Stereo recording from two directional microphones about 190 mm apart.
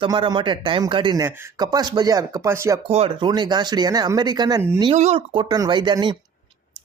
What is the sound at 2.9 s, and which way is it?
Speech, 30° right (ahead or behind).